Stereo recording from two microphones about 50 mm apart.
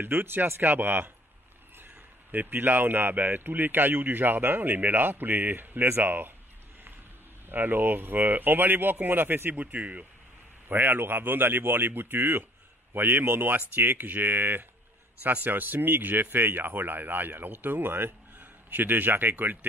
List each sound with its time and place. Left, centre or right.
0.0 s speech: right
2.3 s speech: right
7.4 s speech: right
10.7 s speech: right